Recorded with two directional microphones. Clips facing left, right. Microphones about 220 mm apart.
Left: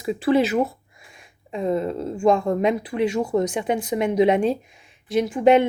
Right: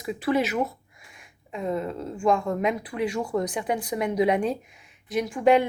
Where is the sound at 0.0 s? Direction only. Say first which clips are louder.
Left 5 dB; 30° left (ahead or behind).